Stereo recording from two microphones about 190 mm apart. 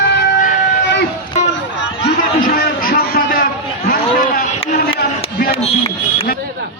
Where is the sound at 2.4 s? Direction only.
50° left (ahead or behind).